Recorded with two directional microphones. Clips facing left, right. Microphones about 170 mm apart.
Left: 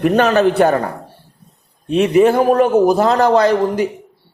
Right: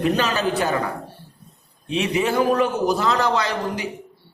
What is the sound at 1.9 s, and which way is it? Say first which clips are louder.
A woman's voice: left 10 dB; 50° left (ahead or behind).